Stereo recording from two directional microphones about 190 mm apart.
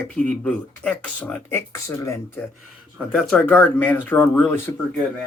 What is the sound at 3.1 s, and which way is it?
Speech, 5° left (ahead or behind).